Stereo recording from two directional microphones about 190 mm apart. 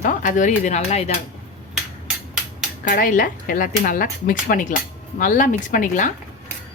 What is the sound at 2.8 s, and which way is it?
Speech, 45° left (ahead or behind).